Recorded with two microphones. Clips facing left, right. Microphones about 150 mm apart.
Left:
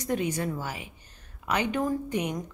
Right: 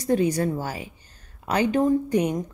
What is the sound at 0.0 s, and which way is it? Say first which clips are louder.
A woman's voice: right 7 dB; 35° right (ahead or behind).